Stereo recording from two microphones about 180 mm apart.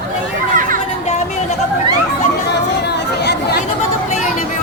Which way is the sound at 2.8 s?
70° left (ahead or behind).